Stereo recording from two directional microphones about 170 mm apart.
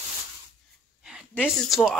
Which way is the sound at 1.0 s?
5° right (ahead or behind).